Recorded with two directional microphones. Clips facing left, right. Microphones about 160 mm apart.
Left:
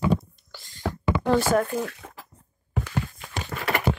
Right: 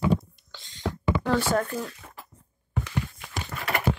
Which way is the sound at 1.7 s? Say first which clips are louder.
Left 4 dB; 80° left.